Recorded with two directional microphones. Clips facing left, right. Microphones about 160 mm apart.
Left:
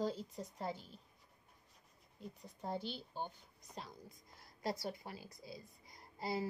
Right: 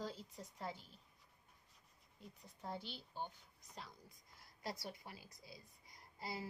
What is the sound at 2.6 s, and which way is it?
Speech, 30° left (ahead or behind).